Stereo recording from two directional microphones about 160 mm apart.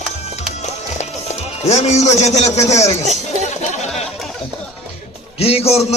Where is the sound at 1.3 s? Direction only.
40° left (ahead or behind).